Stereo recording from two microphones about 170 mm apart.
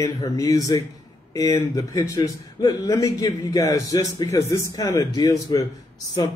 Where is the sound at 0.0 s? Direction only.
20° left (ahead or behind).